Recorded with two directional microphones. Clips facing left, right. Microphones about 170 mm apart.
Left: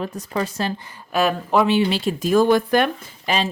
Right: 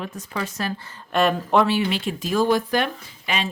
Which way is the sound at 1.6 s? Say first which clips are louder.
Left 4 dB; 25° left (ahead or behind).